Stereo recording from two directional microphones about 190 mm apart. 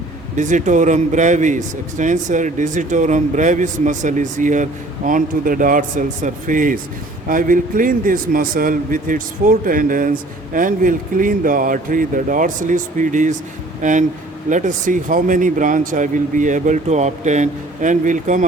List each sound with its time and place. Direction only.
0.3 s speech: 40° right (ahead or behind)
14.5 s speech: 40° right (ahead or behind)